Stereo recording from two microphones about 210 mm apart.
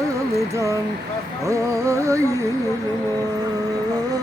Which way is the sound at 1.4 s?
15° right (ahead or behind).